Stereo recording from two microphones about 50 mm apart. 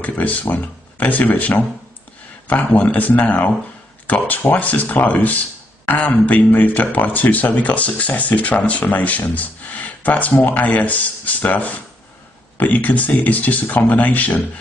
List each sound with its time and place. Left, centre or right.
0.0 s speech: left